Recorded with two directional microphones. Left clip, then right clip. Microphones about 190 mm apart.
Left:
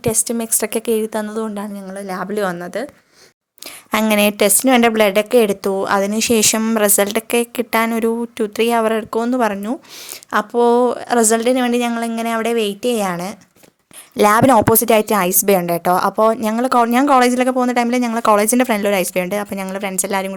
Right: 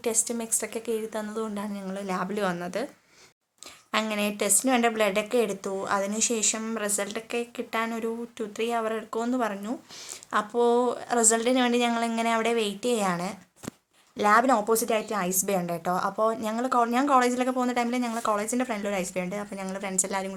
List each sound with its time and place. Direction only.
0.0 s a woman's voice: 40° left (ahead or behind); by 2.8 s 25° left (ahead or behind)
3.9 s a woman's voice: 45° left (ahead or behind)
14.2 s a woman's voice: 50° left (ahead or behind)